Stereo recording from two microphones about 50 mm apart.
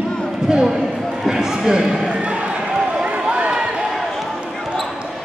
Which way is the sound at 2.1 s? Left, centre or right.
Right.